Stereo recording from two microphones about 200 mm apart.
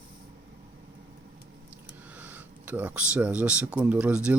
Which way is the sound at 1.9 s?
10° right (ahead or behind).